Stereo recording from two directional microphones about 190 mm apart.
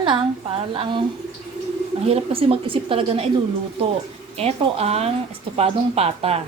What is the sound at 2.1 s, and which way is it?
A woman's voice, 30° right (ahead or behind).